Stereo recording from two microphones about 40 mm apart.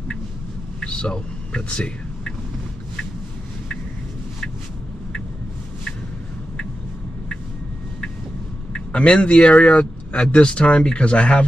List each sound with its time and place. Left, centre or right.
0.7 s vehicle: left
8.7 s speech: left